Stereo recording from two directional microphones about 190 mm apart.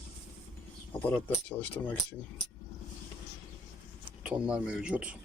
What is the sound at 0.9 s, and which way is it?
Speech, 10° left (ahead or behind).